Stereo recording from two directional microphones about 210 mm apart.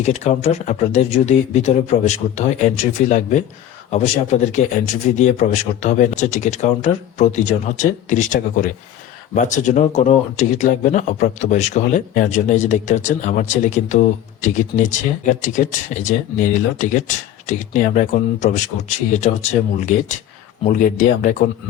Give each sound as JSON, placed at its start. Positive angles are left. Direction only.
{"t": 0.0, "sound": "speech", "side_deg": 30}